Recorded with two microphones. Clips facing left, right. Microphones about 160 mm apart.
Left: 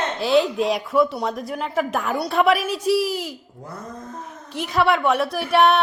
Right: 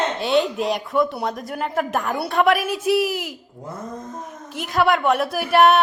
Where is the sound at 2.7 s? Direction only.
55° right (ahead or behind).